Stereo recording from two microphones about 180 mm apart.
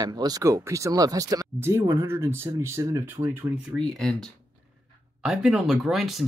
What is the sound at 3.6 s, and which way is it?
Speech, centre (ahead or behind).